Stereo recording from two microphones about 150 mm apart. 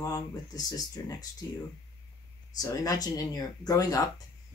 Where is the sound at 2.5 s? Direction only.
20° left (ahead or behind).